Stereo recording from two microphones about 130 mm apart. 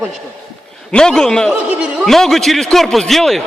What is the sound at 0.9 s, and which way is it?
Speech, 5° left (ahead or behind).